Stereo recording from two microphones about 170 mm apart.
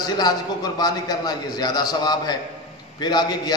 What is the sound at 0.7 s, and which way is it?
A man's voice, 25° left (ahead or behind).